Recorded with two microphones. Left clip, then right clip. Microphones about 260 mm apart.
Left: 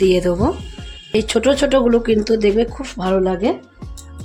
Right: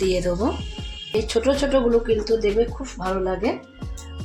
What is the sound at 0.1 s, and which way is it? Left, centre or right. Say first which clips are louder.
Speech: left 6 dB; left.